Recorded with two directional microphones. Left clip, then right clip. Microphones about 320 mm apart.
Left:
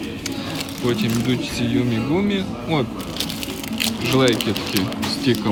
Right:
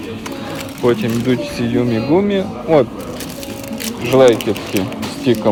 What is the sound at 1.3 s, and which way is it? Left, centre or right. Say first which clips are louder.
Speech: right 5 dB; centre.